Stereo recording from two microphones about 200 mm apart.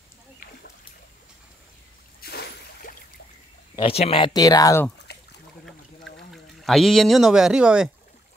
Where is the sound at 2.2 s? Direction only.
50° left (ahead or behind).